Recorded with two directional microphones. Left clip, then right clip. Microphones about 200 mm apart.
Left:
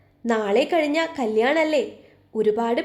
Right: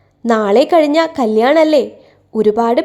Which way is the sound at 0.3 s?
35° right (ahead or behind).